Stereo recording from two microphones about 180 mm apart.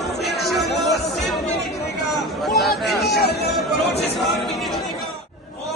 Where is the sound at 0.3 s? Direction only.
Centre (ahead or behind).